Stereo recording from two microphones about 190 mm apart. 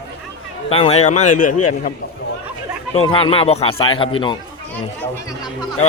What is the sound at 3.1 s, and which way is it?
Speech, 25° left (ahead or behind).